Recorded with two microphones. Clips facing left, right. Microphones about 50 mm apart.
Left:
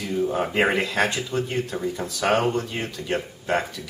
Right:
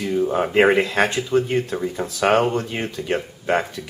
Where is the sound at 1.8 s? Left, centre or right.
Centre.